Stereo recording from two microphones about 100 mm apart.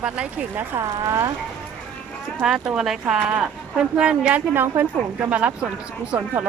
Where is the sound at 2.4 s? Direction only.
5° right (ahead or behind).